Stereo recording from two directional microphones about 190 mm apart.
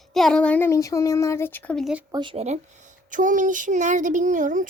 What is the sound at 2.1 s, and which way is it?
Speech, 25° right (ahead or behind).